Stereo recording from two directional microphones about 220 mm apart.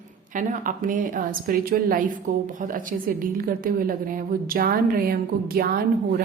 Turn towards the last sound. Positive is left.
turn(degrees=-45)  # may be behind; listen again after turning